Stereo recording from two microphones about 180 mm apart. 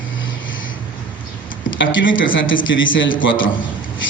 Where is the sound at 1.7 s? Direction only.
90° left.